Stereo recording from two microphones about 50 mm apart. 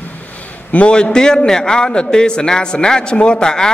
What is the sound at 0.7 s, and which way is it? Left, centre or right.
A man's voice, left.